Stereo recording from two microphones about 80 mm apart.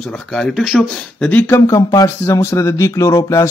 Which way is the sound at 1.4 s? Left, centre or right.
Left.